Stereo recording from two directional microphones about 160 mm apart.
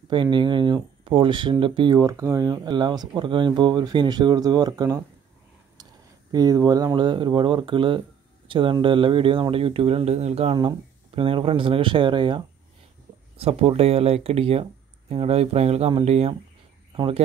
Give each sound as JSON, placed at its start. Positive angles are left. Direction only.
{"t": 0.1, "sound": "speech", "side_deg": -30}
{"t": 6.3, "sound": "speech", "side_deg": -25}